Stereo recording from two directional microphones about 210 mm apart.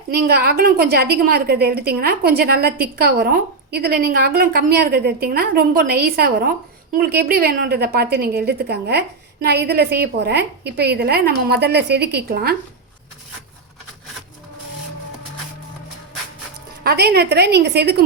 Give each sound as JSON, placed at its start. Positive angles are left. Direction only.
{"t": 0.1, "sound": "a woman's voice", "side_deg": -50}
{"t": 16.8, "sound": "a woman's voice", "side_deg": -50}